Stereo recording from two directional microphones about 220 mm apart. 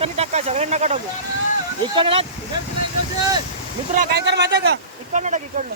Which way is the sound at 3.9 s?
50° right (ahead or behind).